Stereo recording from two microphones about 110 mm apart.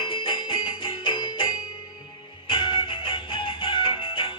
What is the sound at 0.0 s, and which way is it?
Music, 50° left (ahead or behind).